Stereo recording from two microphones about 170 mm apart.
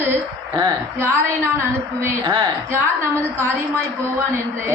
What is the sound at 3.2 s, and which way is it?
Speech, 15° right (ahead or behind).